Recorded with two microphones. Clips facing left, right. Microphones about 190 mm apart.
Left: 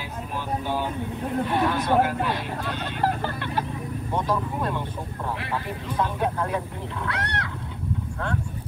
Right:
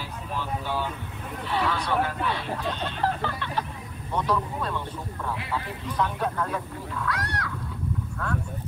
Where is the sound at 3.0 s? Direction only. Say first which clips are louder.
Left 3 dB; 10° left (ahead or behind).